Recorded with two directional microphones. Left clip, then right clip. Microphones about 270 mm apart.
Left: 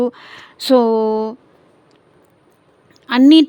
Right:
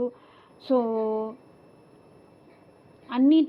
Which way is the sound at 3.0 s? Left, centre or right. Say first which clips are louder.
Left 11 dB; left.